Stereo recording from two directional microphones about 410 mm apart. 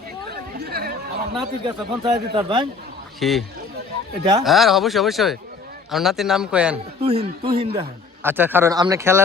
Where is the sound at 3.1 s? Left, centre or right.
Centre.